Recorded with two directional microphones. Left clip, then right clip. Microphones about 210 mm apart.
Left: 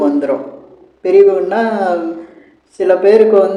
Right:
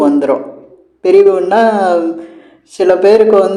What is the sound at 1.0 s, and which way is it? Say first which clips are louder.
A man's voice: right 1 dB; 25° right (ahead or behind).